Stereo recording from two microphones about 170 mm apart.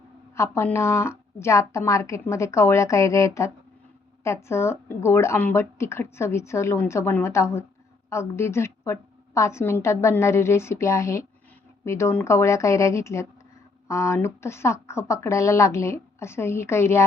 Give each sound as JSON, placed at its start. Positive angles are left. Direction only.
{"t": 0.3, "sound": "speech", "side_deg": 15}